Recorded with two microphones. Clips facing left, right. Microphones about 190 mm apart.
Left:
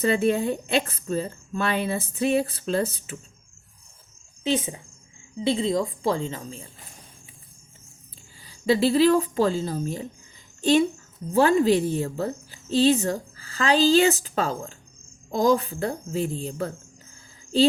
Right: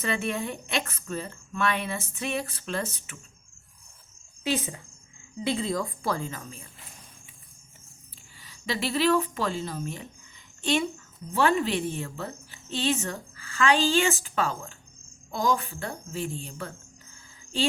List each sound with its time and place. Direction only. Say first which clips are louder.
0.0 s a woman's voice: left 8 dB; 35° left (ahead or behind)
4.5 s a woman's voice: left 4 dB; 25° left (ahead or behind)
8.4 s a woman's voice: left 10 dB; 35° left (ahead or behind)